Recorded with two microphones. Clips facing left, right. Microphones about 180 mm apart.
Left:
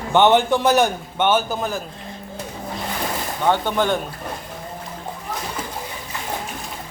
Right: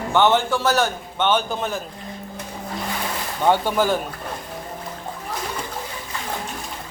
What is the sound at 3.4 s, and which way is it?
Speech, 10° right (ahead or behind).